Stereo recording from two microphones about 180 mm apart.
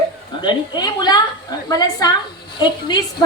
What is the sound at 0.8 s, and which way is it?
A woman's voice, 25° left (ahead or behind).